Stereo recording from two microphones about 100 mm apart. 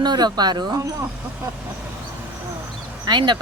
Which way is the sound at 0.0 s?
45° right (ahead or behind).